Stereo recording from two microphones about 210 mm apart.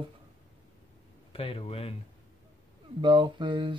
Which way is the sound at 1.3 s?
25° left (ahead or behind).